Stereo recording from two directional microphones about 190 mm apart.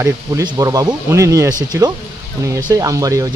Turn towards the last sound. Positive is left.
turn(degrees=-20)  # may be behind; listen again after turning